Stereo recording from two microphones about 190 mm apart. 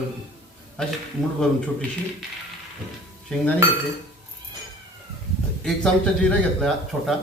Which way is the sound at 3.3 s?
5° left (ahead or behind).